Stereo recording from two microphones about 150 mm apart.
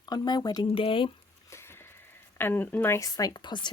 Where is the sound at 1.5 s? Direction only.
15° left (ahead or behind).